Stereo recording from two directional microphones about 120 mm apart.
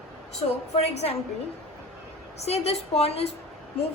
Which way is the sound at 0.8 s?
60° left (ahead or behind).